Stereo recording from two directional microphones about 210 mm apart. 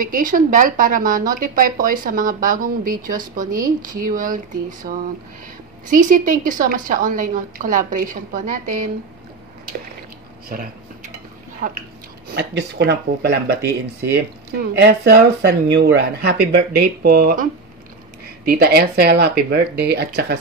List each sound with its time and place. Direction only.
0.0 s a woman's voice: 40° right (ahead or behind)
11.6 s a woman's voice: 35° right (ahead or behind)
12.4 s speech: 55° right (ahead or behind)